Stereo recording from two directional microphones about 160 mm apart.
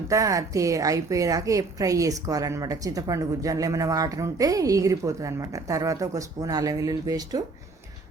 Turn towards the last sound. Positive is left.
turn(degrees=-25)  # may be behind; listen again after turning